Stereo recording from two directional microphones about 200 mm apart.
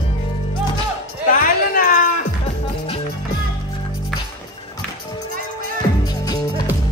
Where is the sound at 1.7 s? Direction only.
45° left (ahead or behind).